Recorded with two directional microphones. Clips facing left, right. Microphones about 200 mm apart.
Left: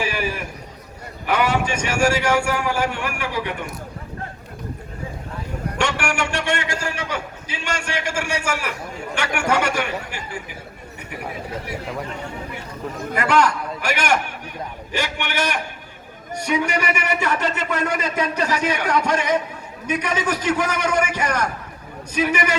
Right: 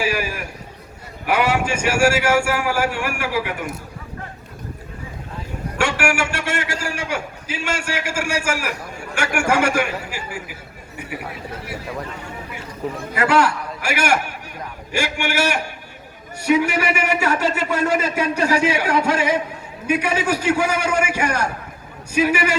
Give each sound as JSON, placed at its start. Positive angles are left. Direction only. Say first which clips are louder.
{"t": 0.0, "sound": "a sound", "louder": "right 2 dB", "side_deg": -10}
{"t": 1.3, "sound": "a man's voice", "louder": "right 1 dB", "side_deg": -10}
{"t": 5.7, "sound": "a man's voice", "louder": "right 3 dB", "side_deg": -5}
{"t": 13.1, "sound": "a man's voice", "louder": "right 1 dB", "side_deg": -5}